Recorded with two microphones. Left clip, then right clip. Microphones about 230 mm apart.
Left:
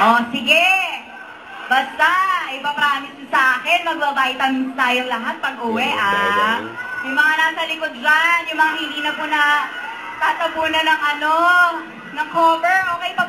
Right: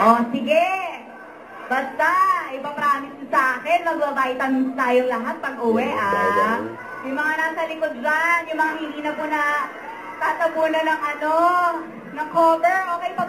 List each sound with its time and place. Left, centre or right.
0.0 s a woman's voice: centre